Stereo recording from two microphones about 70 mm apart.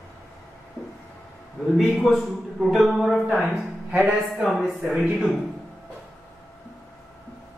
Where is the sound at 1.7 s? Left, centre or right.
Centre.